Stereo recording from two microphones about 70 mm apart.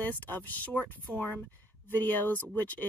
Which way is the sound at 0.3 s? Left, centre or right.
Left.